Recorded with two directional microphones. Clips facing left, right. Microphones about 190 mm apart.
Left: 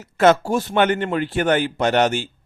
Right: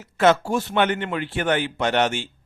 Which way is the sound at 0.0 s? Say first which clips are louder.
Left 3 dB; 40° left (ahead or behind).